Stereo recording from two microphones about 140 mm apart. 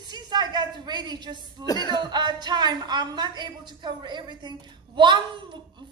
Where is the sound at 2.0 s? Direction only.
30° right (ahead or behind).